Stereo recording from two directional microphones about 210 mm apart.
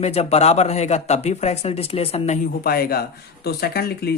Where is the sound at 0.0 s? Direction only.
30° left (ahead or behind).